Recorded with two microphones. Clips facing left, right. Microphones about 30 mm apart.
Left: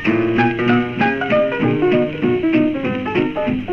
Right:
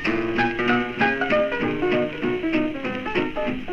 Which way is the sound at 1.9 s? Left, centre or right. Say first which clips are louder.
Left 6 dB; centre.